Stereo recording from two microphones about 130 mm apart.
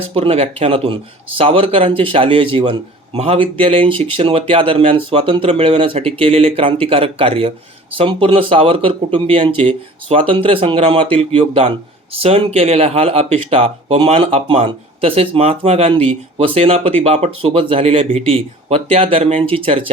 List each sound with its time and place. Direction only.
0.0 s a man's voice: 45° right (ahead or behind)